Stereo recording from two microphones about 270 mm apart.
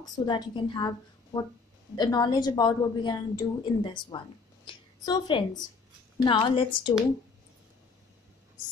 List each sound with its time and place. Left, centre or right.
0.2 s a woman's voice: centre